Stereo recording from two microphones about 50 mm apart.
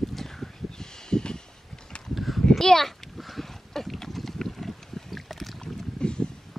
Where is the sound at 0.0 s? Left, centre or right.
Centre.